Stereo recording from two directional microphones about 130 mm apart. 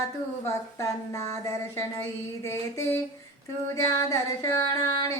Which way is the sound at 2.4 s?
20° left (ahead or behind).